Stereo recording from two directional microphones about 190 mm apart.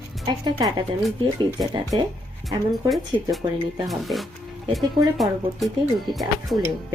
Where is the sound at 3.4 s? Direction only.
25° right (ahead or behind).